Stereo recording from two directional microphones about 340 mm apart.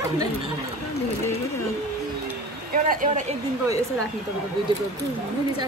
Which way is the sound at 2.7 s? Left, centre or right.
Right.